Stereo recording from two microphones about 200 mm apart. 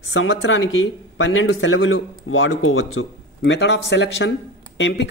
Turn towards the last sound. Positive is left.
turn(degrees=60)  # may be behind; listen again after turning